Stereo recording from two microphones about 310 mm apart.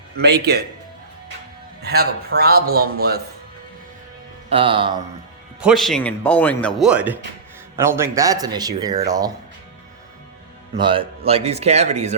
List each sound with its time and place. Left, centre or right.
0.2 s speech: right
1.8 s speech: right
4.4 s speech: centre
5.5 s speech: centre
10.8 s speech: centre